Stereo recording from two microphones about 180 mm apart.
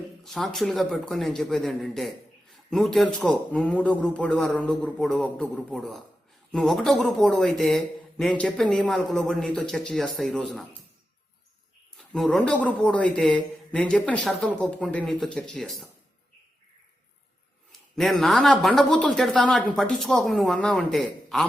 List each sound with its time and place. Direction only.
0.3 s speech: centre (ahead or behind)
11.9 s speech: centre (ahead or behind)
17.7 s speech: centre (ahead or behind)